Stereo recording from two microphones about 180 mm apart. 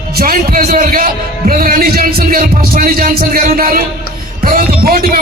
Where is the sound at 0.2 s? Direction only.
50° right (ahead or behind).